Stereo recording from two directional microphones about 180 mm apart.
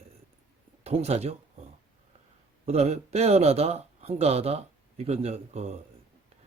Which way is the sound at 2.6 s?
35° right (ahead or behind).